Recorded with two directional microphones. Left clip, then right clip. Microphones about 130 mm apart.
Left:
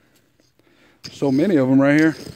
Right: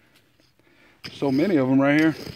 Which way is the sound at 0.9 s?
55° left (ahead or behind).